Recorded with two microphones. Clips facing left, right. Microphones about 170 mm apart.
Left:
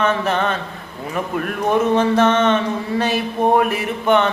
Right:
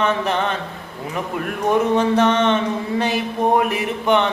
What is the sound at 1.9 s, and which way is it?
A man's voice, 15° right (ahead or behind).